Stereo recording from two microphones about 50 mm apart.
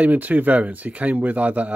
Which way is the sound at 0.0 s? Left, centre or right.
Right.